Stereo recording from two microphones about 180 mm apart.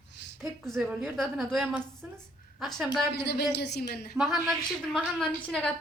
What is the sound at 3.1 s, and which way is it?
A woman's voice, 65° left (ahead or behind).